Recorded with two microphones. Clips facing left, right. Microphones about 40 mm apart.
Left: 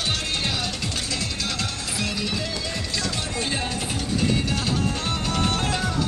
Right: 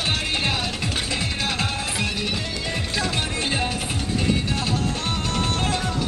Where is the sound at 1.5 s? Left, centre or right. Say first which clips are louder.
Right 3 dB; right.